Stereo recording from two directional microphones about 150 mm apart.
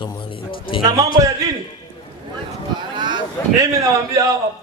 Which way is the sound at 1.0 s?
20° right (ahead or behind).